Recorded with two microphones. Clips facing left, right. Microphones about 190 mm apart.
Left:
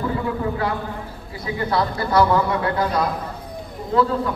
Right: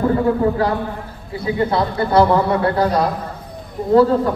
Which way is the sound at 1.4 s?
25° right (ahead or behind).